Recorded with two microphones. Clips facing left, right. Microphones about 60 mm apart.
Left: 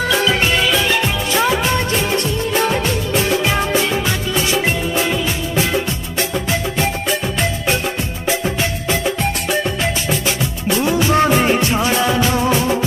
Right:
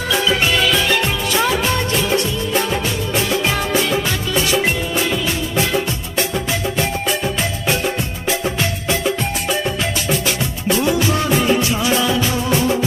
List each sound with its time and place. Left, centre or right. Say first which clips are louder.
0.5 s music: even; centre
3.4 s music: left 1 dB; left
10.8 s music: left 4 dB; left